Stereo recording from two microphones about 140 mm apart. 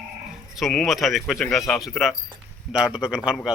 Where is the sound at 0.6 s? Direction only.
Centre (ahead or behind).